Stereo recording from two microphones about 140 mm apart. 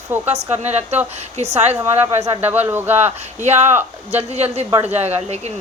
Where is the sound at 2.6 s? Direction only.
15° right (ahead or behind).